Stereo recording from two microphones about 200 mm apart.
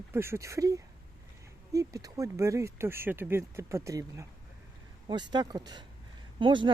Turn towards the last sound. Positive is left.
turn(degrees=-25)  # may be behind; listen again after turning